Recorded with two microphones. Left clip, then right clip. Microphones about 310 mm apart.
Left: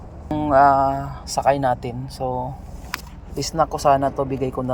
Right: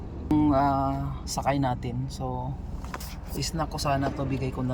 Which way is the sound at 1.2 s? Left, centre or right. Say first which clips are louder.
Left 9 dB; centre.